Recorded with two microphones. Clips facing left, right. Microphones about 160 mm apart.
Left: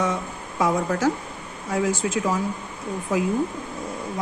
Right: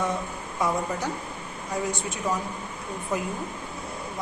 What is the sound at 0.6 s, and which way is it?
A woman's voice, 90° left.